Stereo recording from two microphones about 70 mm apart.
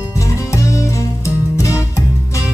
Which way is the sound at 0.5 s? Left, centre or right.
Left.